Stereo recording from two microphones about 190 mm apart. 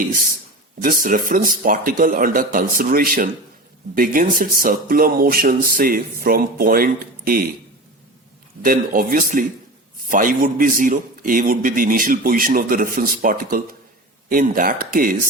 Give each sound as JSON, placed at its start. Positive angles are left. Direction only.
{"t": 0.8, "sound": "a man's voice", "side_deg": -45}
{"t": 8.6, "sound": "a man's voice", "side_deg": -50}